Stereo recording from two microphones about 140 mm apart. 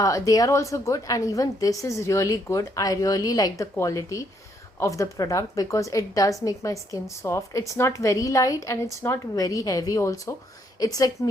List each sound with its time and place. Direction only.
0.0 s a woman's voice: 25° left (ahead or behind)